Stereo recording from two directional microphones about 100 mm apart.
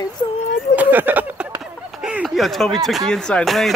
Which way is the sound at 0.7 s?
15° right (ahead or behind).